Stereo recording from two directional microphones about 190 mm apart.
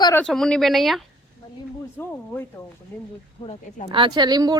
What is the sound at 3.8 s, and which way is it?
Speech, 25° right (ahead or behind).